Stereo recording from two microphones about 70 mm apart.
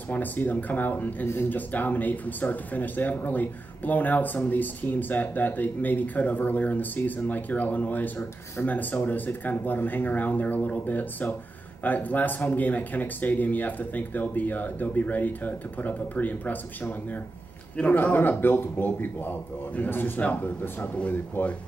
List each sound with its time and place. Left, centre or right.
0.1 s speech: left